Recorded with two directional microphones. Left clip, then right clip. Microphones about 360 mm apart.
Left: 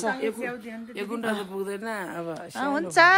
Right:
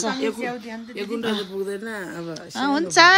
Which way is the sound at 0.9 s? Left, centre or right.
Centre.